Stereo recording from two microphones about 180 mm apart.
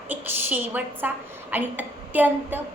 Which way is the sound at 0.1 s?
10° right (ahead or behind).